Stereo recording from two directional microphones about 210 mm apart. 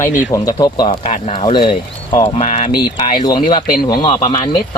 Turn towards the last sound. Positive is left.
turn(degrees=25)  # may be behind; listen again after turning